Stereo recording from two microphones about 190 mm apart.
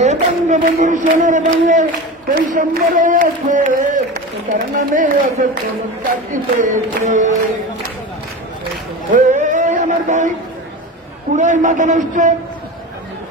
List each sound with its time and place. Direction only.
0.0 s speech: 40° right (ahead or behind)
9.1 s a sound: 40° right (ahead or behind)
11.3 s speech: 40° right (ahead or behind)